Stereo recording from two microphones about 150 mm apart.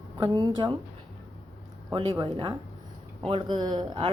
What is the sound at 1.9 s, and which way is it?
Speech, 30° right (ahead or behind).